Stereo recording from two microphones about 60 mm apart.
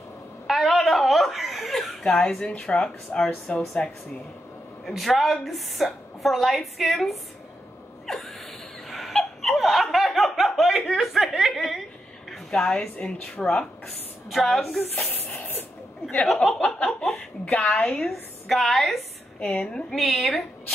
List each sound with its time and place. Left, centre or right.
0.5 s chuckle: centre
2.1 s speech: centre
3.5 s a sound: left
4.8 s a woman's voice: centre
8.1 s a sound: centre
8.8 s laughter: centre
12.4 s speech: centre
15.0 s a sound: left
16.6 s a sound: centre
17.0 s a woman's voice: centre
17.7 s speech: centre
18.1 s a woman's voice: centre